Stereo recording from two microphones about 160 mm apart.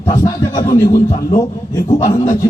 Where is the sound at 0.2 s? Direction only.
20° left (ahead or behind).